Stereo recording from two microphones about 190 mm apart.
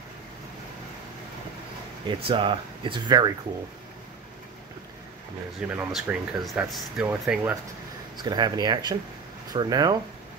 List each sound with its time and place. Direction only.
2.0 s speech: 25° right (ahead or behind)
5.7 s speech: 5° right (ahead or behind)
8.2 s speech: 20° right (ahead or behind)